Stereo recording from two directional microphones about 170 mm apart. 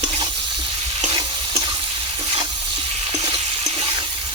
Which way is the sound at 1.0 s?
30° right (ahead or behind).